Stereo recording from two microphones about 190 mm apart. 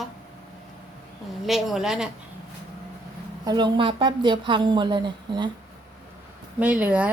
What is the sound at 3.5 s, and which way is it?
A woman's voice, 25° right (ahead or behind).